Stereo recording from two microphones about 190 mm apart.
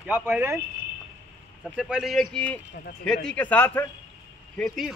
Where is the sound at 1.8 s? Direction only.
5° right (ahead or behind).